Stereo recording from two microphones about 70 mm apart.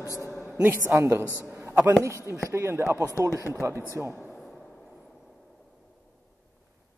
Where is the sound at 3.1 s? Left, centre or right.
Left.